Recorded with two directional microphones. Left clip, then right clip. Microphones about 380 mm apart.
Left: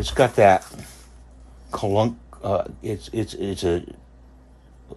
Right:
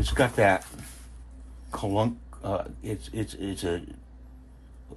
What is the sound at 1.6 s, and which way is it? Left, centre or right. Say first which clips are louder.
Speech: left 6 dB; centre.